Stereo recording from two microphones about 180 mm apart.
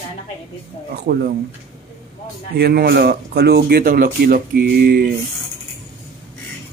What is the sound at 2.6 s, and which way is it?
Speech, 60° right (ahead or behind).